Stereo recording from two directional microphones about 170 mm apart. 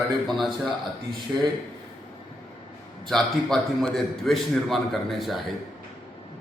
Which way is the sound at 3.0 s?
5° left (ahead or behind).